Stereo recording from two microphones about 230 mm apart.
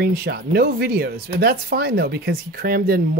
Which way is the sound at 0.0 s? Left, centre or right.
Right.